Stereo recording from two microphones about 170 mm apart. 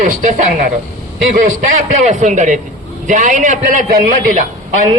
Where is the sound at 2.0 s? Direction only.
45° right (ahead or behind).